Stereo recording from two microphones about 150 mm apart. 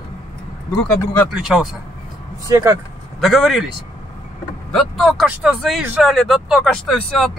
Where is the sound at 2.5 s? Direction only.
20° right (ahead or behind).